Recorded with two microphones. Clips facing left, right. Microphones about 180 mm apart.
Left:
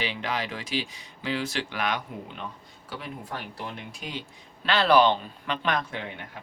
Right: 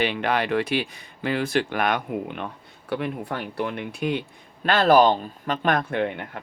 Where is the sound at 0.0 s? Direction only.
60° right (ahead or behind).